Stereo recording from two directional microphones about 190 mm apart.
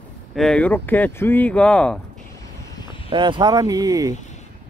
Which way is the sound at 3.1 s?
25° right (ahead or behind).